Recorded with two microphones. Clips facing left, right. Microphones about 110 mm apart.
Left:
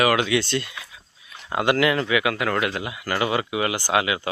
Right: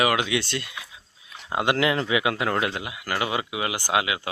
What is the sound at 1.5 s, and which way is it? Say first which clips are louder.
Speech: left 2 dB; 15° right (ahead or behind).